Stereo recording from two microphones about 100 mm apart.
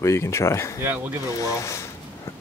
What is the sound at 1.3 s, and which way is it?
Speech, 30° left (ahead or behind).